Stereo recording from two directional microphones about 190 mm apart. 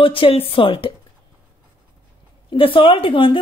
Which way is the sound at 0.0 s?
30° left (ahead or behind).